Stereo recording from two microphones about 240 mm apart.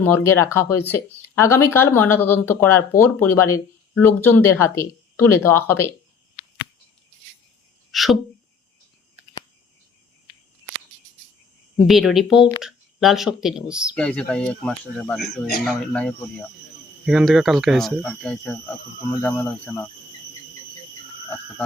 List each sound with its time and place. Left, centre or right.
0.3 s a woman's voice: centre
7.9 s a sound: centre
11.9 s speech: centre
15.2 s a man's voice: left
15.6 s speech: centre